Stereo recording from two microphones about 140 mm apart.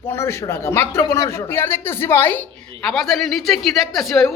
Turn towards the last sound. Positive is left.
turn(degrees=0)  # may be behind; listen again after turning